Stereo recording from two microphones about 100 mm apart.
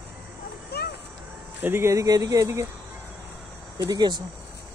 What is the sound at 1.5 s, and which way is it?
Speech, 20° right (ahead or behind).